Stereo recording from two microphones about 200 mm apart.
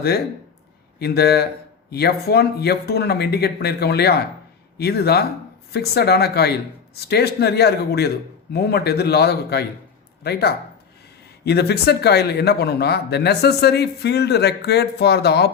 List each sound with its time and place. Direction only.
0.9 s speech: 55° left (ahead or behind)
11.4 s speech: 55° left (ahead or behind)